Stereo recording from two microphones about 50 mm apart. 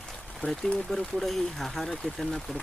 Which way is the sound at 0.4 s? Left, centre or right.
Left.